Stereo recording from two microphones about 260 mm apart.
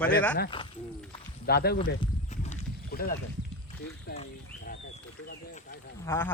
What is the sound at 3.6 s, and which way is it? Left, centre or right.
Rowboat, left.